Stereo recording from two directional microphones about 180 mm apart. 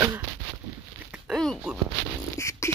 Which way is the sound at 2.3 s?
15° left (ahead or behind).